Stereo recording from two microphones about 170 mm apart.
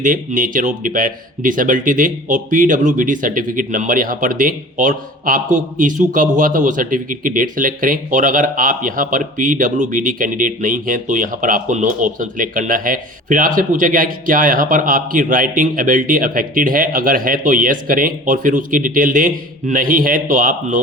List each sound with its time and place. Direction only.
0.0 s speech: 50° right (ahead or behind)